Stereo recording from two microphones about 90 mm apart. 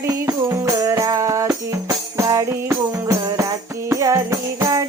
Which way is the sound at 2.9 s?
40° right (ahead or behind).